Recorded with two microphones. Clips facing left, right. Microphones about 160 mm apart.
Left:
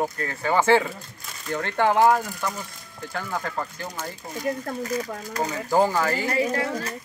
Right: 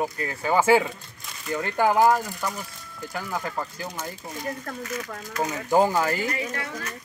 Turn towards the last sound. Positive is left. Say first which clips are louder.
# left 7 dB
turn(degrees=35)  # may be behind; listen again after turning